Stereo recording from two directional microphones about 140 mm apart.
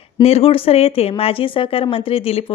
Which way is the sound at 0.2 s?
45° left (ahead or behind).